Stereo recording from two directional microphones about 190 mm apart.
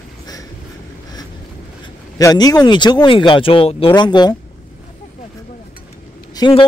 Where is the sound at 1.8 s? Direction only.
20° left (ahead or behind).